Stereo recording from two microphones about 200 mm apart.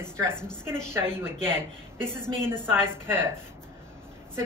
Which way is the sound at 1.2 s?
10° right (ahead or behind).